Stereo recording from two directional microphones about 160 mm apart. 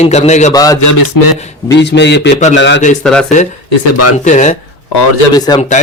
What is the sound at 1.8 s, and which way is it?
A man's voice, 90° left.